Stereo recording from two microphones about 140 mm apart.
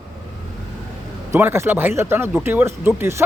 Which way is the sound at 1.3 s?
15° right (ahead or behind).